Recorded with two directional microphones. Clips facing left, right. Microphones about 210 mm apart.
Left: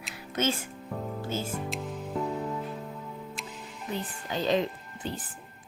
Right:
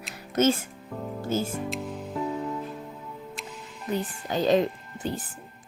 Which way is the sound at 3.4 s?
Centre (ahead or behind).